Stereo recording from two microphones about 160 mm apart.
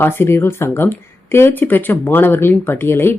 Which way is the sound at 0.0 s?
15° left (ahead or behind).